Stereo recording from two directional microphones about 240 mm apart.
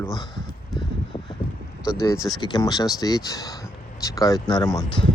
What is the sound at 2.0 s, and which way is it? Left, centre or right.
Speech, centre.